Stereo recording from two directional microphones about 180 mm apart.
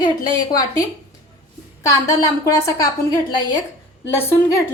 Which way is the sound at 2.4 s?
20° left (ahead or behind).